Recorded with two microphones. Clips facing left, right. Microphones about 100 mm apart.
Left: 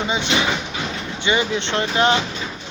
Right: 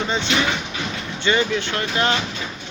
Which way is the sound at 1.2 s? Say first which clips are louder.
Right 1 dB; 15° left (ahead or behind).